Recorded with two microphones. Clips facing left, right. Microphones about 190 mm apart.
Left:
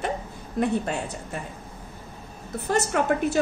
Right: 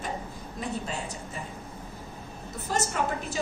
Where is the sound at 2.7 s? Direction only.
60° left (ahead or behind).